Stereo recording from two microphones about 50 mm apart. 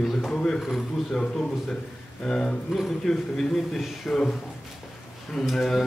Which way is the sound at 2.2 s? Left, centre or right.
Centre.